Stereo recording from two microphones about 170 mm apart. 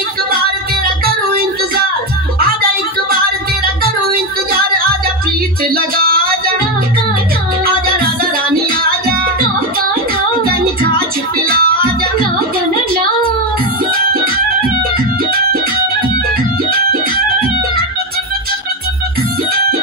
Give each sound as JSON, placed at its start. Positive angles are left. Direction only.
{"t": 4.0, "sound": "child singing", "side_deg": -60}
{"t": 5.7, "sound": "a sound", "side_deg": -60}
{"t": 7.6, "sound": "music", "side_deg": -60}
{"t": 11.3, "sound": "music", "side_deg": -60}